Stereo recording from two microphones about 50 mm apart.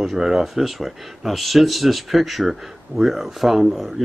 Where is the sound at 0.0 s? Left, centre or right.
Centre.